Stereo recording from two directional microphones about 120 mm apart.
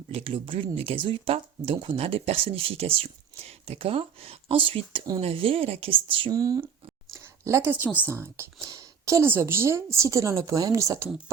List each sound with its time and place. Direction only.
0.1 s speech: 50° right (ahead or behind)
6.3 s a woman's voice: 30° right (ahead or behind)
7.1 s a sound: 25° right (ahead or behind)
7.9 s a woman's voice: 20° right (ahead or behind)